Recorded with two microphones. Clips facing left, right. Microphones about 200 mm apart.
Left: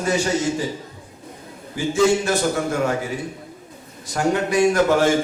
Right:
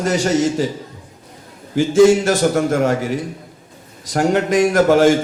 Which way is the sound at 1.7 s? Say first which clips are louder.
Right 7 dB; 90° right.